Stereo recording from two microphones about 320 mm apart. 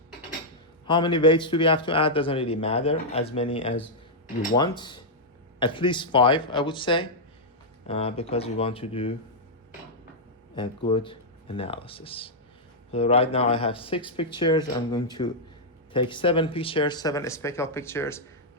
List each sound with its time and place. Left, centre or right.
0.9 s speech: centre
10.5 s speech: centre